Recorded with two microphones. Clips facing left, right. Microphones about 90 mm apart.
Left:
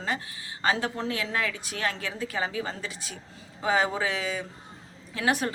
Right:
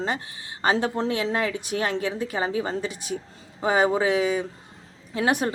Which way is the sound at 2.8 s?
20° right (ahead or behind).